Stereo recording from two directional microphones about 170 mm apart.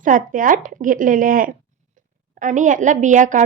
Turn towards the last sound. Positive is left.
turn(degrees=-50)  # may be behind; listen again after turning